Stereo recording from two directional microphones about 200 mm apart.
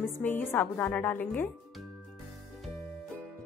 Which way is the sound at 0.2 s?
10° left (ahead or behind).